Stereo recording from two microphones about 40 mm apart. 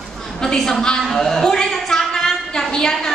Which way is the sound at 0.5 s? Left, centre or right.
Centre.